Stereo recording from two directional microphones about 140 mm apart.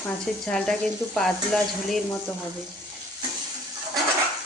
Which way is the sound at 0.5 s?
5° left (ahead or behind).